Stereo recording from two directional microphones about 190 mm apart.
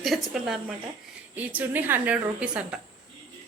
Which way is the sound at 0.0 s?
Centre (ahead or behind).